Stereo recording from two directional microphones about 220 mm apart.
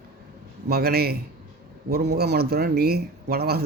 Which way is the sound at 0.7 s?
45° right (ahead or behind).